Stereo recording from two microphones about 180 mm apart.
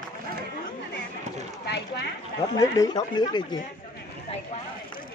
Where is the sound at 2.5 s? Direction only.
20° left (ahead or behind).